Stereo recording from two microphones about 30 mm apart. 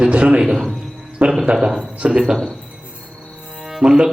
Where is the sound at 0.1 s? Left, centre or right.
Right.